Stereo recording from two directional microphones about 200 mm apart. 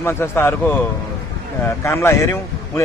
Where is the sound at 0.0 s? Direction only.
10° left (ahead or behind).